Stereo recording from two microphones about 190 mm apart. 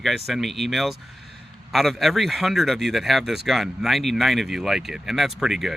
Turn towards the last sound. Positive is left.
turn(degrees=0)  # may be behind; listen again after turning